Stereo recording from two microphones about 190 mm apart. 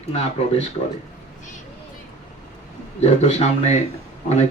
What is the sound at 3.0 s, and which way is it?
Speech, 35° left (ahead or behind).